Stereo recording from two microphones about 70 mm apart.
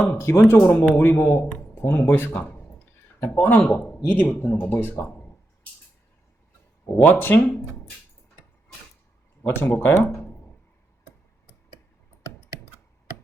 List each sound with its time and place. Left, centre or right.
0.0 s speech: left
6.8 s speech: left
9.4 s speech: left